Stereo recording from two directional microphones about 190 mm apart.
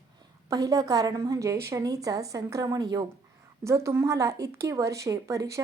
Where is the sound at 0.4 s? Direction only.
15° right (ahead or behind).